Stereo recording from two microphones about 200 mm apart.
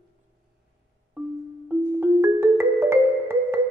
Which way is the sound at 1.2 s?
10° right (ahead or behind).